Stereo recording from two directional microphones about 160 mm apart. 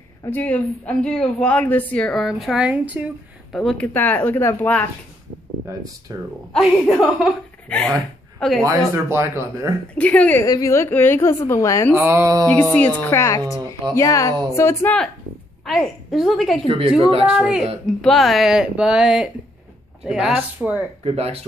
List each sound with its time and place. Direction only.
0.2 s a woman's voice: 10° left (ahead or behind); by 3.1 s 10° right (ahead or behind)
3.5 s a woman's voice: 5° left (ahead or behind)
6.1 s speech: 20° right (ahead or behind)
6.5 s a woman's voice: centre (ahead or behind)
8.6 s speech: 15° right (ahead or behind)
9.9 s a woman's voice: 10° left (ahead or behind)
10.4 s a woman's voice: 20° left (ahead or behind)
11.9 s speech: 15° right (ahead or behind)
12.7 s a woman's voice: 10° left (ahead or behind)
15.6 s a woman's voice: centre (ahead or behind)
16.6 s speech: 35° right (ahead or behind)
17.3 s a woman's voice: centre (ahead or behind)
21.0 s speech: 40° right (ahead or behind)